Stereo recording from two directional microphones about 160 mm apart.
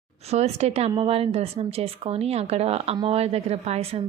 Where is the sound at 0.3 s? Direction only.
40° right (ahead or behind).